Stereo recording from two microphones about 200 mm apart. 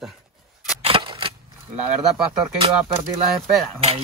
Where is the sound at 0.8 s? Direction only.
25° right (ahead or behind).